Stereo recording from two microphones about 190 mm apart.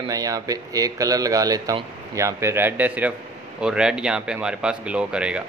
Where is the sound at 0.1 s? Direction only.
20° right (ahead or behind).